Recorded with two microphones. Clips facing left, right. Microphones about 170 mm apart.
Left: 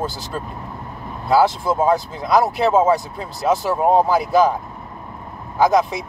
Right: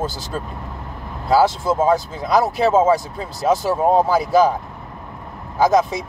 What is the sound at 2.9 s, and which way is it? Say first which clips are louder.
Speech: right 1 dB; 40° right (ahead or behind).